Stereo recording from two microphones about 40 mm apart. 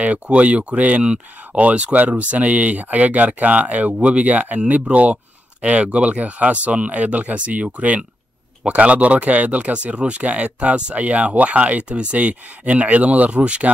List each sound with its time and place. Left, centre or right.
0.0 s speech: right